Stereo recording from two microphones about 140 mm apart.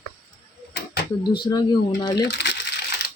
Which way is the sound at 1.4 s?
30° left (ahead or behind).